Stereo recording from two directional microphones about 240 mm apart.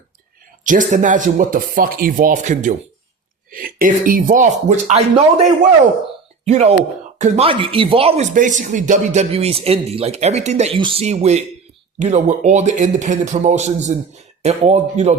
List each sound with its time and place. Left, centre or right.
0.6 s speech: right